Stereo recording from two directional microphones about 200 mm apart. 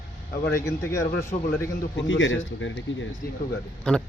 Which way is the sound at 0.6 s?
15° left (ahead or behind).